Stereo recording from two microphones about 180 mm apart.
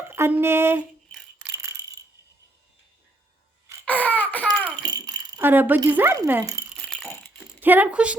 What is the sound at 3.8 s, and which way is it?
Baby cry, 10° left (ahead or behind).